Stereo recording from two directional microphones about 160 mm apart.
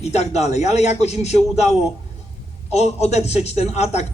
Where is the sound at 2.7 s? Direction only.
45° left (ahead or behind).